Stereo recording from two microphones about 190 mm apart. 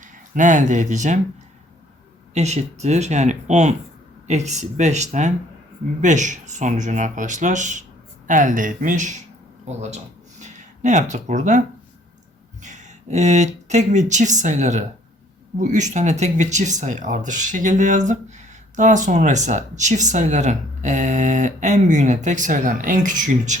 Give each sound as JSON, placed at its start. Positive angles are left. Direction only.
{"t": 0.0, "sound": "speech", "side_deg": -40}
{"t": 2.3, "sound": "speech", "side_deg": -35}
{"t": 12.6, "sound": "speech", "side_deg": -40}